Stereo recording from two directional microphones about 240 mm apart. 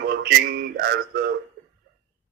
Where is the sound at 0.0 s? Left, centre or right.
Right.